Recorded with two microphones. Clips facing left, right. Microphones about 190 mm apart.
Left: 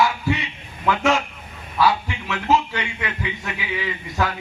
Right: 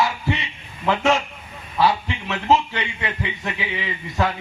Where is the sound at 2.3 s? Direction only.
30° right (ahead or behind).